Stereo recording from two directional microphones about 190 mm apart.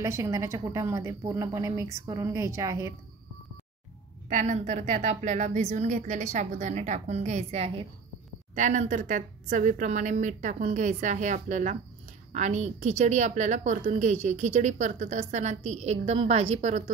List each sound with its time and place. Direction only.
0.0 s a woman's voice: 15° right (ahead or behind)
4.3 s a woman's voice: 40° right (ahead or behind)